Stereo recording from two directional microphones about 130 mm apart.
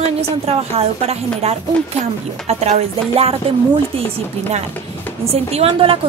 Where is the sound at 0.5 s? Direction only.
50° right (ahead or behind).